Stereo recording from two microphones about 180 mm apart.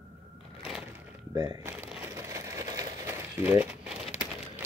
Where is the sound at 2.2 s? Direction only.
15° right (ahead or behind).